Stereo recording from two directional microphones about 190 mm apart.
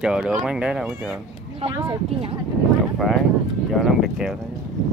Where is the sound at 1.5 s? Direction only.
25° right (ahead or behind).